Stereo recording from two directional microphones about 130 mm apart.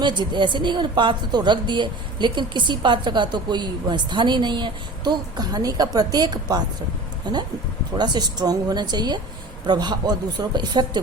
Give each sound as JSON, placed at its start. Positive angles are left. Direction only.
{"t": 0.0, "sound": "a woman's voice", "side_deg": -35}